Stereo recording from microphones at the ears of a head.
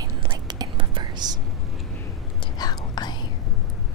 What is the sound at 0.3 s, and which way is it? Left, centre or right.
Whispering, right.